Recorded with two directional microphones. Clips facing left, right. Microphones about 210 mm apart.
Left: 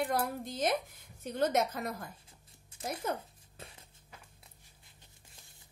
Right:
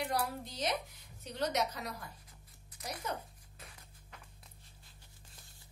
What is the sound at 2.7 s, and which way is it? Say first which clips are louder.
Music: left 7 dB; 25° left (ahead or behind).